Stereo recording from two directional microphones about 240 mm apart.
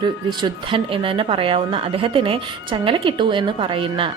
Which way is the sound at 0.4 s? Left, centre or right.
Right.